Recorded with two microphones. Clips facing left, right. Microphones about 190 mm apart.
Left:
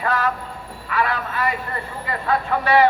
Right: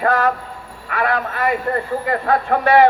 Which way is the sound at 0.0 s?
50° right (ahead or behind).